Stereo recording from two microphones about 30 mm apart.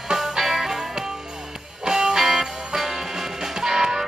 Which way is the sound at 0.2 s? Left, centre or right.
Centre.